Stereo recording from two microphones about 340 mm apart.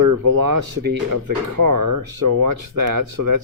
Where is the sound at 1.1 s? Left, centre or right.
Right.